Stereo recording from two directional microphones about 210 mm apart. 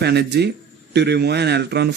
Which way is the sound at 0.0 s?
50° right (ahead or behind).